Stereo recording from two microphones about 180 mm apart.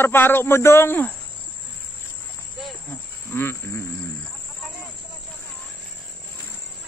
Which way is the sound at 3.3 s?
15° left (ahead or behind).